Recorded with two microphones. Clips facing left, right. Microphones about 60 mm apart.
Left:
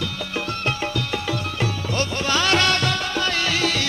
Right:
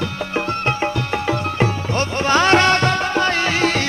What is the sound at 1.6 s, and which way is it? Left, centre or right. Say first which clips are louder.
Music: right 5 dB; right.